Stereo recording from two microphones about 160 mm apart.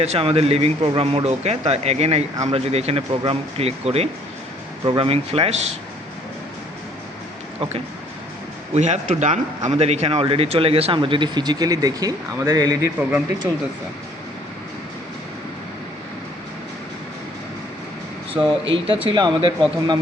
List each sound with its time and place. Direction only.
0.0 s a man's voice: 40° right (ahead or behind)
8.7 s a man's voice: 45° right (ahead or behind); by 12.9 s 20° right (ahead or behind)
13.0 s speech: 10° right (ahead or behind)
18.4 s speech: 20° right (ahead or behind)
19.0 s speech: 30° right (ahead or behind)